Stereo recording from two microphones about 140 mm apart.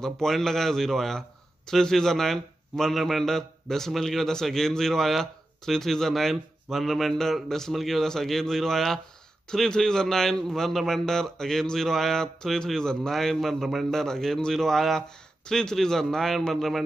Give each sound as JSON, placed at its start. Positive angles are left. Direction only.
{"t": 0.0, "sound": "a man's voice", "side_deg": 5}